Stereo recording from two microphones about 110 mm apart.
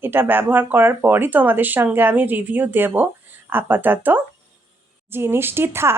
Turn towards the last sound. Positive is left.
turn(degrees=-20)  # may be behind; listen again after turning